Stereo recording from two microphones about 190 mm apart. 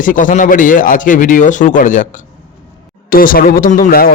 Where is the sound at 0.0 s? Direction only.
45° left (ahead or behind).